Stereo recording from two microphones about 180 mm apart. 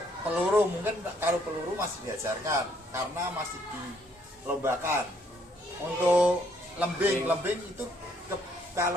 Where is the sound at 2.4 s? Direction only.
15° right (ahead or behind).